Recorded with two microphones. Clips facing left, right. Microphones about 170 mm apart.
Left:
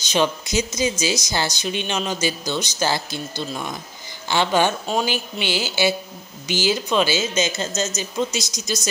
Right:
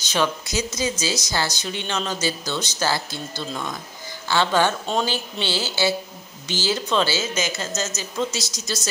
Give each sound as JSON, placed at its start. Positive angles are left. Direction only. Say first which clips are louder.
{"t": 0.0, "sound": "a woman's voice", "louder": "left 2 dB", "side_deg": 20}